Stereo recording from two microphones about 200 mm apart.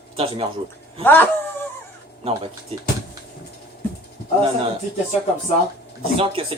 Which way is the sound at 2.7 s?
30° right (ahead or behind).